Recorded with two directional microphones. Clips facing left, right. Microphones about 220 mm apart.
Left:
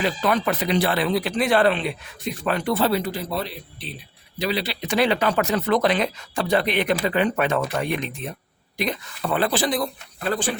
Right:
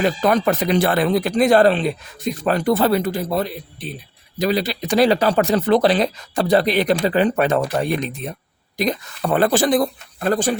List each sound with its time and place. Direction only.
0.0 s speech: 45° right (ahead or behind)